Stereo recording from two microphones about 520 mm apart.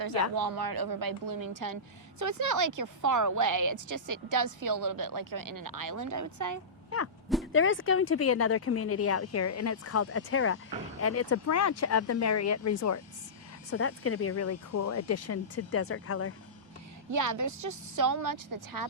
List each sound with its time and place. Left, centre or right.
0.0 s a woman's voice: right
7.5 s speech: left
17.1 s a woman's voice: right